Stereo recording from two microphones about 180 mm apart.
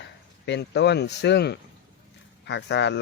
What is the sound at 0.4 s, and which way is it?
Speech, 75° left (ahead or behind).